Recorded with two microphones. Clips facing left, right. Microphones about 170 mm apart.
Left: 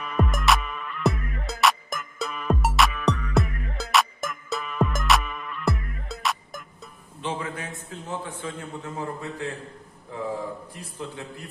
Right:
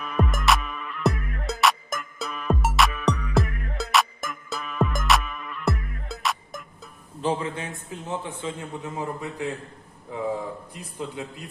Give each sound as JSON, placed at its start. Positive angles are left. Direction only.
{"t": 0.0, "sound": "music", "side_deg": 0}
{"t": 7.2, "sound": "a man's voice", "side_deg": -35}